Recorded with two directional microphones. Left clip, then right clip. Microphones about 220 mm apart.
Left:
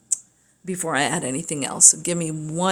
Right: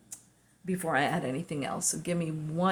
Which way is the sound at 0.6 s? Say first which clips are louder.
Left 6 dB; 55° left (ahead or behind).